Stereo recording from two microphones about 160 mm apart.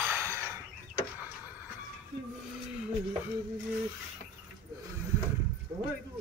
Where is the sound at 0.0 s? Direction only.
15° right (ahead or behind).